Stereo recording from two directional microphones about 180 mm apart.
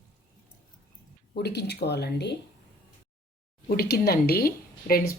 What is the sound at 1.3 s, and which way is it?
Speech, 65° left (ahead or behind).